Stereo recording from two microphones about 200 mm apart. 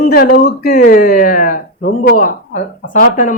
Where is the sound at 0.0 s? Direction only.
50° left (ahead or behind).